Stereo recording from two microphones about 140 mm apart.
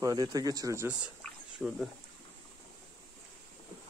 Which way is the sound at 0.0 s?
25° right (ahead or behind).